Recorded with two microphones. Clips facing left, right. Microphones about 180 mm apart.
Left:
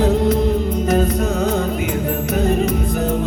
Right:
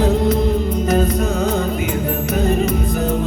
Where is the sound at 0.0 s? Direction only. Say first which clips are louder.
Even; 55° left (ahead or behind).